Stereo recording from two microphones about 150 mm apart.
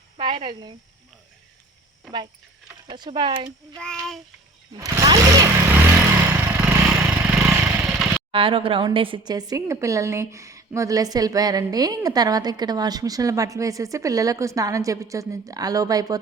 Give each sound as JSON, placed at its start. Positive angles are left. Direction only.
{"t": 0.2, "sound": "speech", "side_deg": -35}
{"t": 2.8, "sound": "speech", "side_deg": -30}
{"t": 3.8, "sound": "child singing", "side_deg": 5}
{"t": 4.7, "sound": "vehicle", "side_deg": -25}
{"t": 7.7, "sound": "a sound", "side_deg": -10}
{"t": 8.3, "sound": "a woman's voice", "side_deg": -35}